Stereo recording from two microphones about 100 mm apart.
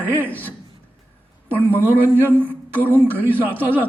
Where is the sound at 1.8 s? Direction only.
20° right (ahead or behind).